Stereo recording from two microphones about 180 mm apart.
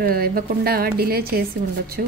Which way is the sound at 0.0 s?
55° right (ahead or behind).